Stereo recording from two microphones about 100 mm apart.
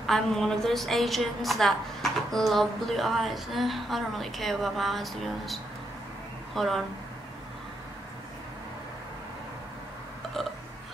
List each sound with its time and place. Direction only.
0.0 s a woman's voice: 5° left (ahead or behind)